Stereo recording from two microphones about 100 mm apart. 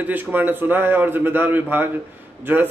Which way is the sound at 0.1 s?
20° right (ahead or behind).